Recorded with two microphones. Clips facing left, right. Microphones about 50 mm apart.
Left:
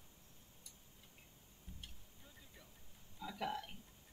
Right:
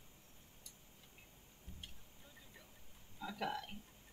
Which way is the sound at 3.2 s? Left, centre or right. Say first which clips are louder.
Right 2 dB; right.